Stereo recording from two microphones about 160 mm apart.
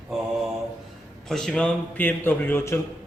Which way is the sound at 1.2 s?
5° left (ahead or behind).